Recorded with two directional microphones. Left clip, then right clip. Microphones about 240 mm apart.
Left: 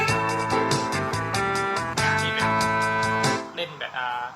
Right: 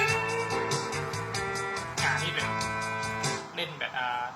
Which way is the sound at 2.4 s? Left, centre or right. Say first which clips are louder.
Left 8 dB; left.